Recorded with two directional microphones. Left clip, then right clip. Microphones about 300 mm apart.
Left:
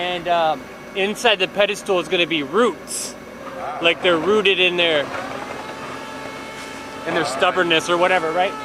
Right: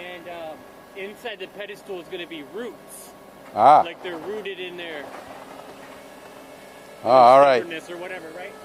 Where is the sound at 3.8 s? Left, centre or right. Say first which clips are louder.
Left 8 dB; left.